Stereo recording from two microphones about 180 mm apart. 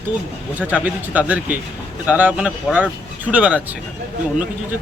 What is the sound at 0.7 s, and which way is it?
Speech, 10° right (ahead or behind).